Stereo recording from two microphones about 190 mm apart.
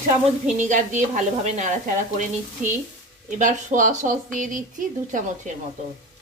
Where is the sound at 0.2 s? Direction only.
40° right (ahead or behind).